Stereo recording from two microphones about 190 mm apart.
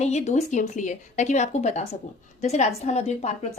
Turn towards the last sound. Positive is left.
turn(degrees=35)  # may be behind; listen again after turning